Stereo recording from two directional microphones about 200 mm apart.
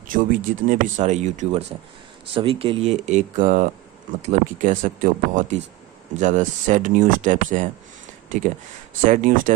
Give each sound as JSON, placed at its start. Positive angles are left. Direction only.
{"t": 0.1, "sound": "speech", "side_deg": -40}
{"t": 2.3, "sound": "speech", "side_deg": -25}